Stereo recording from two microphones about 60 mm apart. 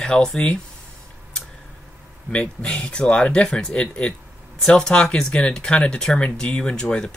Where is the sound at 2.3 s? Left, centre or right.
Centre.